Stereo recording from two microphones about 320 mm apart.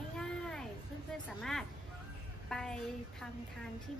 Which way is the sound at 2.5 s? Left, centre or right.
Centre.